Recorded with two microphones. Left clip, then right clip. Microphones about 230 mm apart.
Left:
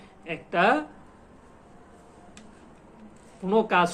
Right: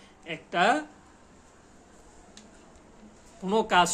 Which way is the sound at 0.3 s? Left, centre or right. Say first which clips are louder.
Left 2 dB; centre.